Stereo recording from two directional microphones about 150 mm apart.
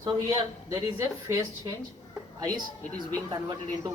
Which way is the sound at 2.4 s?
25° right (ahead or behind).